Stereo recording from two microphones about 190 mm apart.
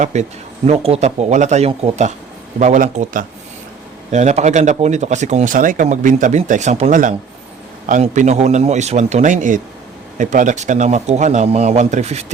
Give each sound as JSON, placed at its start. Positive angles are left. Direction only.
{"t": 0.0, "sound": "speech", "side_deg": -40}